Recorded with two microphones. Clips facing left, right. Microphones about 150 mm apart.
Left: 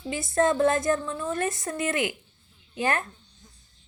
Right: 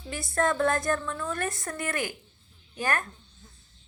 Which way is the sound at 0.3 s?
20° left (ahead or behind).